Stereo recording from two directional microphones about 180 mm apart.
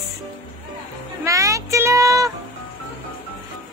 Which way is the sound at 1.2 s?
15° right (ahead or behind).